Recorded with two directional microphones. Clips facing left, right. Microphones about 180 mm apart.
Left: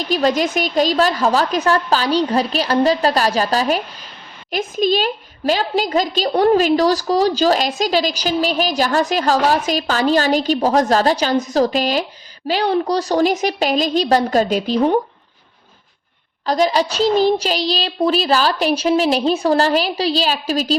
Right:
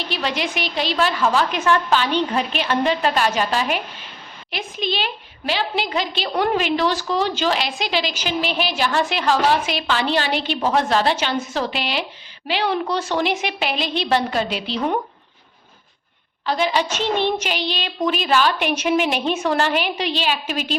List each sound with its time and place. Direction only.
0.0 s a woman's voice: 40° left (ahead or behind)
16.5 s a woman's voice: 40° left (ahead or behind)